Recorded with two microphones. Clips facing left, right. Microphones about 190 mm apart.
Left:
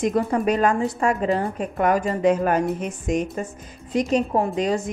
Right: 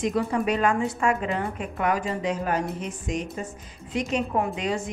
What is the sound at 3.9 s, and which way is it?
A woman's voice, 40° left (ahead or behind).